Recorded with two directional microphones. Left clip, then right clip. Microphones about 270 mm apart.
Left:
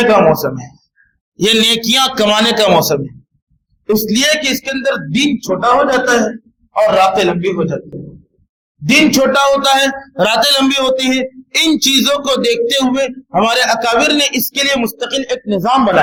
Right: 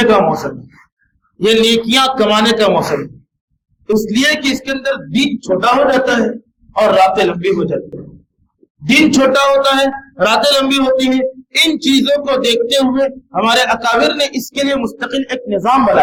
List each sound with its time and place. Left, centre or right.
0.0 s a sound: left
1.4 s a man's voice: left
3.8 s a man's voice: left
8.9 s a man's voice: left